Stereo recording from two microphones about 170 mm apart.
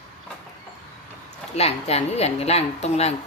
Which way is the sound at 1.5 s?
35° left (ahead or behind).